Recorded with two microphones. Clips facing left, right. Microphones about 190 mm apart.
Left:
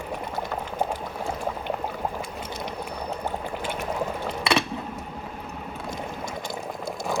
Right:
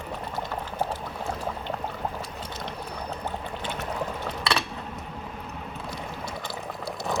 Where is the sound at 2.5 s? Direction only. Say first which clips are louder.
Left 3 dB; 15° left (ahead or behind).